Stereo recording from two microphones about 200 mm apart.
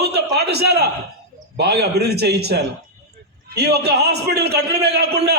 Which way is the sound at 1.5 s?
55° right (ahead or behind).